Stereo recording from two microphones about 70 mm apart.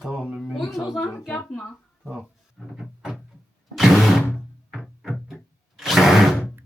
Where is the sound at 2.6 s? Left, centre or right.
Centre.